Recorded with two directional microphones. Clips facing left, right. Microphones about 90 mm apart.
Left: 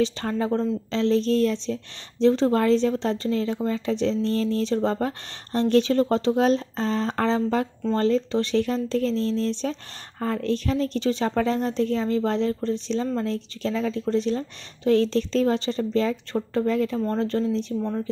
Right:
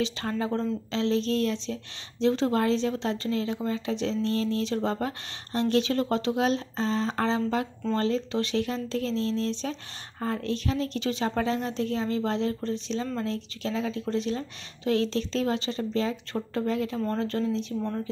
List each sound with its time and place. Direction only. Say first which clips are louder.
0.0 s speech: left 5 dB; 35° left (ahead or behind)